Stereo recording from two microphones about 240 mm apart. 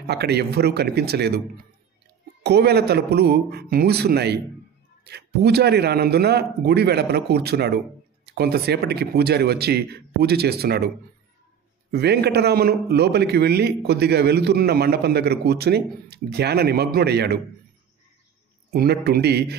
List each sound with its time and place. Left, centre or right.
0.0 s a man's voice: right
2.4 s a man's voice: right
11.9 s a man's voice: right
18.7 s speech: right